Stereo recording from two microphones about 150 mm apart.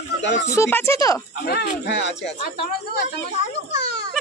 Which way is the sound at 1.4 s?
90° left.